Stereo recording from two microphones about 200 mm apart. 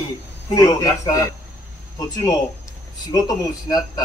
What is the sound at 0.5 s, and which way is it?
Speech, 15° left (ahead or behind).